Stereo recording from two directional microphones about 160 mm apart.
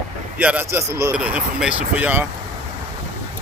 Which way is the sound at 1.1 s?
5° right (ahead or behind).